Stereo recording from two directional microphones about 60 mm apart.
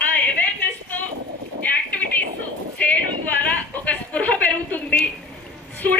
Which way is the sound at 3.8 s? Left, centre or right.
Left.